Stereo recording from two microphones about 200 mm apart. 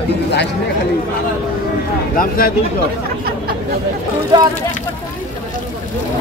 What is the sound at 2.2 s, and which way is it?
Speech, 45° left (ahead or behind).